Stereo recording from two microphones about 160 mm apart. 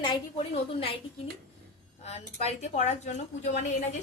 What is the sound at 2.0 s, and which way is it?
A woman's voice, 40° left (ahead or behind).